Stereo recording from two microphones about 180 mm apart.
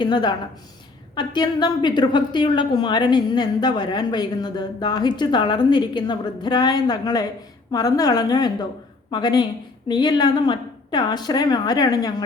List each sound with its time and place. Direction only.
0.0 s a woman's voice: 25° left (ahead or behind)